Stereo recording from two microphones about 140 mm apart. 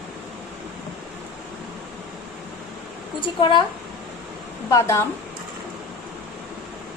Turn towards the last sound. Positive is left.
turn(degrees=20)  # may be behind; listen again after turning